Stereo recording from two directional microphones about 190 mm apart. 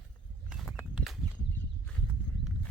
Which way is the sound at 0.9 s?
Centre (ahead or behind).